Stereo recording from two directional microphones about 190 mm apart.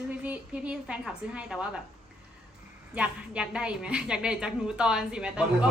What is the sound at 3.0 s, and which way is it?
A man's voice, 5° right (ahead or behind).